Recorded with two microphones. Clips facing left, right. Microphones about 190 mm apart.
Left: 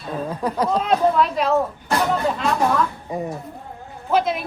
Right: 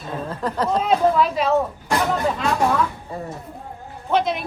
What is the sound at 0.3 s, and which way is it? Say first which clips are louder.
Speech: left 1 dB; 10° left (ahead or behind).